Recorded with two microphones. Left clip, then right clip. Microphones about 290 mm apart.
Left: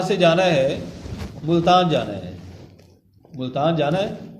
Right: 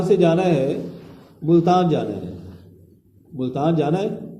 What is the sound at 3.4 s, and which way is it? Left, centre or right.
Speech, left.